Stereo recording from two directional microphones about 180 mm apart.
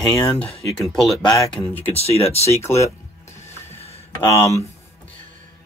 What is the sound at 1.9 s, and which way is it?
Speech, 35° left (ahead or behind).